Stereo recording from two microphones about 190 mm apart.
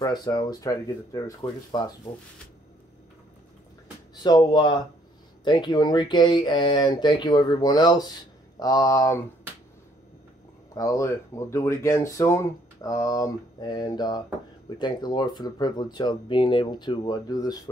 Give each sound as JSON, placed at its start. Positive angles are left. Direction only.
{"t": 0.0, "sound": "speech", "side_deg": 20}
{"t": 4.2, "sound": "speech", "side_deg": 20}
{"t": 10.7, "sound": "speech", "side_deg": 15}